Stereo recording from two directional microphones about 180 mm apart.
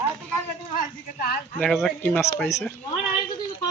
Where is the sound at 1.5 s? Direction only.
5° left (ahead or behind).